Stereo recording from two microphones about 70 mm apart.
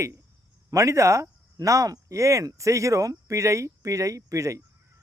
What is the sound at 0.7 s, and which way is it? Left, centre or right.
Speech, right.